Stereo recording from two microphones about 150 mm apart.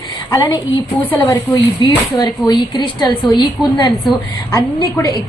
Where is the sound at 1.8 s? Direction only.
30° left (ahead or behind).